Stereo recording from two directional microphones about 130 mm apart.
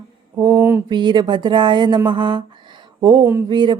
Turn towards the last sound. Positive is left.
turn(degrees=-35)  # may be behind; listen again after turning